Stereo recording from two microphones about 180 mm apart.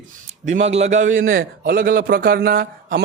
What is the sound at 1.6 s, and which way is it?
A man's voice, 50° right (ahead or behind).